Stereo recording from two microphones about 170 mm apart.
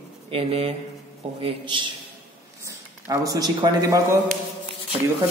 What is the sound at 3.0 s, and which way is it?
Speech, 20° right (ahead or behind).